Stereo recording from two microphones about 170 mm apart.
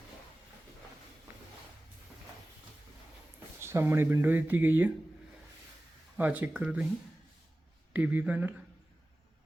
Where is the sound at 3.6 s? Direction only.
15° right (ahead or behind).